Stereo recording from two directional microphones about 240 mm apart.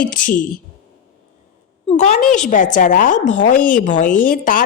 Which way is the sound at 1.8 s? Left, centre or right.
Left.